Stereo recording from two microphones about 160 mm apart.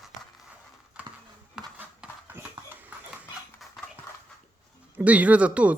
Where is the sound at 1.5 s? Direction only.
10° right (ahead or behind).